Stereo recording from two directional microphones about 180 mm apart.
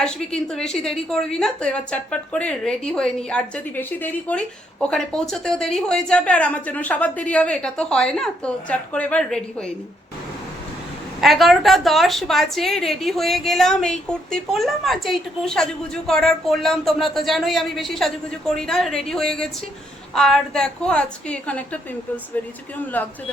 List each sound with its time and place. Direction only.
0.0 s a woman's voice: 5° left (ahead or behind)
11.2 s a woman's voice: centre (ahead or behind)
22.9 s speech: 10° left (ahead or behind)